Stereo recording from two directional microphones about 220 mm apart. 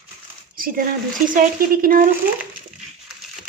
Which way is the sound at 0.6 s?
40° right (ahead or behind).